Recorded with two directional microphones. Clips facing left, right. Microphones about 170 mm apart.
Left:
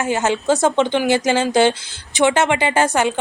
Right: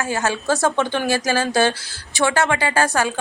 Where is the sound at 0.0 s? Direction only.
20° left (ahead or behind).